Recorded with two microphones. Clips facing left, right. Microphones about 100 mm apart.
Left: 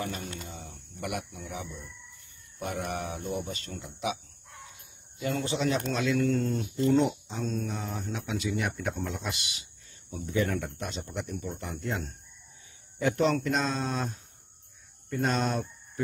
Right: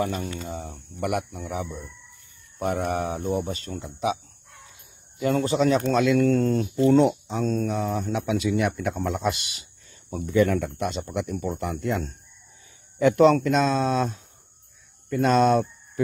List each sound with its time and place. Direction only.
0.5 s speech: 50° right (ahead or behind)
2.7 s speech: 40° right (ahead or behind)
5.4 s speech: 50° right (ahead or behind)
5.9 s speech: 70° right (ahead or behind)
13.0 s speech: 90° right